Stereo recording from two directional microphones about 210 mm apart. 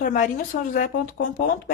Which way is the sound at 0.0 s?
35° left (ahead or behind).